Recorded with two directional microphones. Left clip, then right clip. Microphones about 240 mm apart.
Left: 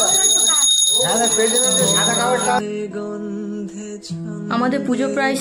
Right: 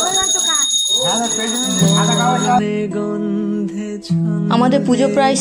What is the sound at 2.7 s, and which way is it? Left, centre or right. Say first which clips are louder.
Music: right 5 dB; right.